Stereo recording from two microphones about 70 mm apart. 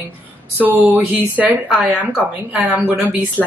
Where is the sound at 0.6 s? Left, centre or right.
Right.